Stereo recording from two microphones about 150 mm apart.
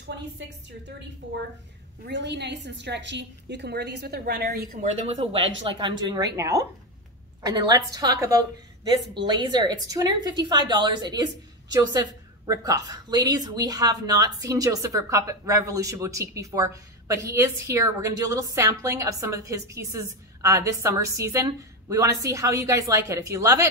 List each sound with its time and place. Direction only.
3.6 s a woman's voice: 90° right; by 4.8 s 75° right (ahead or behind)
4.9 s a woman's voice: 45° right (ahead or behind); by 23.7 s 20° right (ahead or behind)